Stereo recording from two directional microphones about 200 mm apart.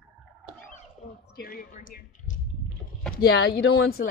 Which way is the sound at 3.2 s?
55° left (ahead or behind).